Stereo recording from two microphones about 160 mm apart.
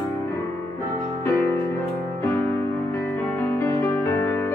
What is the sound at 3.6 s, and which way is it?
Music, 15° left (ahead or behind).